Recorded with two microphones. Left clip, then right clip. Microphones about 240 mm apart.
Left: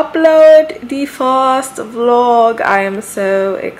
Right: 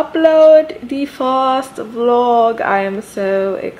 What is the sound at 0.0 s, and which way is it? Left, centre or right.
A woman's voice, centre.